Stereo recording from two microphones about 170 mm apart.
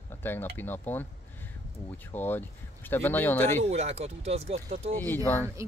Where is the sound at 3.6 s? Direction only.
40° right (ahead or behind).